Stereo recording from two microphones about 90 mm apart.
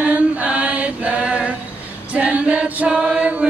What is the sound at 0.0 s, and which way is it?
Chant, 15° right (ahead or behind).